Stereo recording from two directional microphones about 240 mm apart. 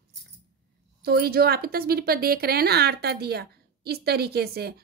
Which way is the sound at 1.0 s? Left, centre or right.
Right.